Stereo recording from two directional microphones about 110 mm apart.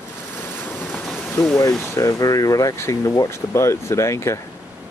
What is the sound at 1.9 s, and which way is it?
Speech, 30° left (ahead or behind).